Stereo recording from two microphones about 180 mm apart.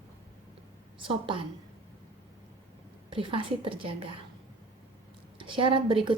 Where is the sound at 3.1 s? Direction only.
30° right (ahead or behind).